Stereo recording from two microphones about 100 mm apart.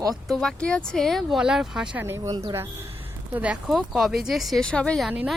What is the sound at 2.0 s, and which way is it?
Speech, 30° right (ahead or behind).